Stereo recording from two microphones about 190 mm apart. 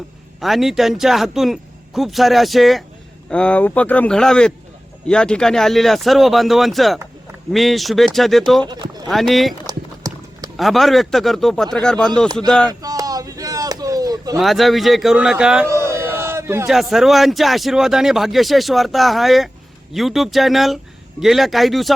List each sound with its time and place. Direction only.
0.3 s speech: centre (ahead or behind)
8.6 s speech: 25° right (ahead or behind)
9.0 s speech: centre (ahead or behind)
9.6 s clip-clop: 20° right (ahead or behind)
10.6 s speech: centre (ahead or behind)
12.8 s a sound: 20° right (ahead or behind)
14.3 s speech: centre (ahead or behind)
15.7 s a sound: 15° right (ahead or behind)
16.6 s speech: centre (ahead or behind)